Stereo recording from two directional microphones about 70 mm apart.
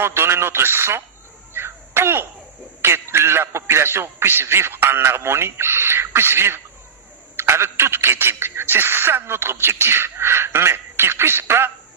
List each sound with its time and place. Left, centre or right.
0.0 s speech: right
1.5 s crow: right
2.8 s speech: right